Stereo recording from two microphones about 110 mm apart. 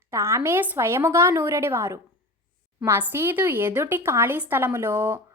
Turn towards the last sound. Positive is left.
turn(degrees=-20)  # may be behind; listen again after turning